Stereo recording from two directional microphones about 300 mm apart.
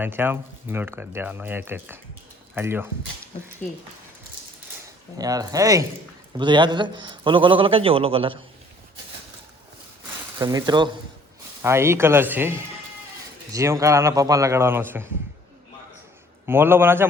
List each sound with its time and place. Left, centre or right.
0.0 s a man's voice: centre
5.1 s a man's voice: centre
10.3 s a man's voice: centre
16.5 s a man's voice: centre